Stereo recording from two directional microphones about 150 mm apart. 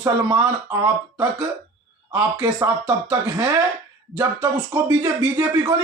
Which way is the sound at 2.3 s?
20° right (ahead or behind).